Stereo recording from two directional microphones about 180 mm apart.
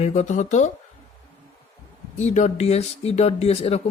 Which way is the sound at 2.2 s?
40° left (ahead or behind).